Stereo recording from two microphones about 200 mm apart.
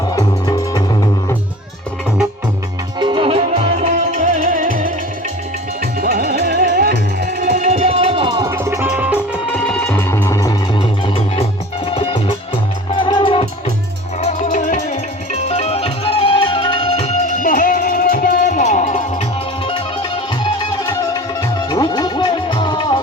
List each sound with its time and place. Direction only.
0.2 s music: 15° left (ahead or behind)
3.0 s music: 25° right (ahead or behind)
8.5 s music: 15° right (ahead or behind)
9.6 s music: 5° left (ahead or behind)
11.0 s music: 25° left (ahead or behind)
14.2 s music: 35° left (ahead or behind)
19.6 s music: 25° left (ahead or behind)
21.7 s music: 20° left (ahead or behind)